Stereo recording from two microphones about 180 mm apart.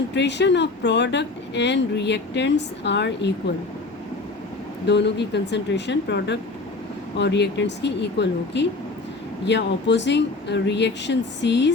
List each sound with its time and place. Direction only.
0.1 s speech: 75° left (ahead or behind)
4.9 s speech: 70° left (ahead or behind)